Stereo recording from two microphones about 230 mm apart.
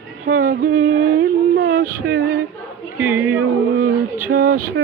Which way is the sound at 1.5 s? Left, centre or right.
Right.